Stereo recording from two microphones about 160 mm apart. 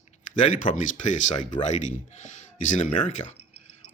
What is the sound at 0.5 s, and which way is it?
Speech, 55° left (ahead or behind).